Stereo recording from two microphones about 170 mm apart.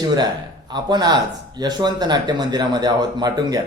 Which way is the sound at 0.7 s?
25° right (ahead or behind).